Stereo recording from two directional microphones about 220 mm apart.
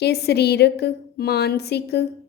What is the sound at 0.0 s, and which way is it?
A woman's voice, 50° left (ahead or behind).